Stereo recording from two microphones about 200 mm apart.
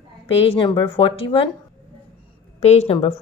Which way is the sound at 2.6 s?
30° left (ahead or behind).